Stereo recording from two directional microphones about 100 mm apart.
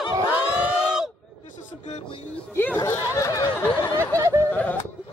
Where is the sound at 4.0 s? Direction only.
30° right (ahead or behind).